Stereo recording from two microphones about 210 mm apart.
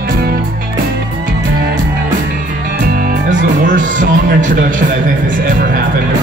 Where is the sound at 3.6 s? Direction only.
40° right (ahead or behind).